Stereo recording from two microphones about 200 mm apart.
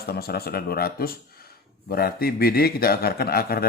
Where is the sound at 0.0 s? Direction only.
50° left (ahead or behind).